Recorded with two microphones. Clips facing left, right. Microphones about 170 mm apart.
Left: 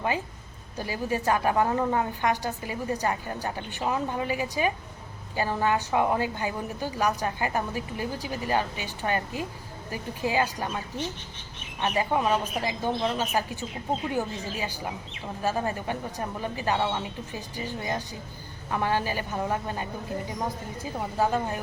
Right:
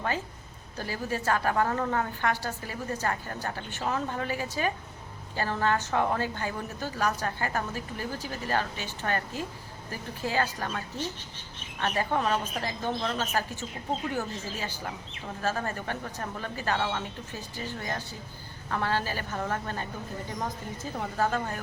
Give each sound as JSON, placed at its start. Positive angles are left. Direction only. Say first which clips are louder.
{"t": 0.8, "sound": "a woman's voice", "louder": "left 3 dB", "side_deg": 15}